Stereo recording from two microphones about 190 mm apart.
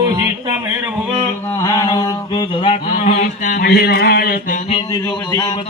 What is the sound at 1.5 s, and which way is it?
Mantra, 20° left (ahead or behind).